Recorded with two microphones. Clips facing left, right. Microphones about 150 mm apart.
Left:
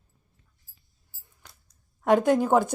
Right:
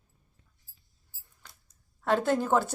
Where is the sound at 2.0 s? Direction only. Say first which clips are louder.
Left 6 dB; 15° left (ahead or behind).